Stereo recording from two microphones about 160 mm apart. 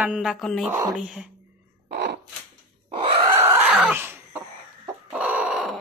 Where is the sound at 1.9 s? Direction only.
90° right.